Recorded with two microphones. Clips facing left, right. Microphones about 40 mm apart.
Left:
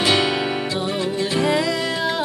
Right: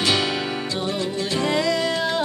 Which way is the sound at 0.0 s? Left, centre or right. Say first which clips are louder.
Left 3 dB; centre.